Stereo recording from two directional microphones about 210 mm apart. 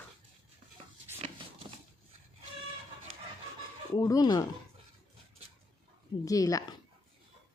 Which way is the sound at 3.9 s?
20° left (ahead or behind).